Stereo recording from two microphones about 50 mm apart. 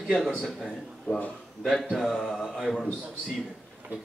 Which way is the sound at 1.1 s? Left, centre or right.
Left.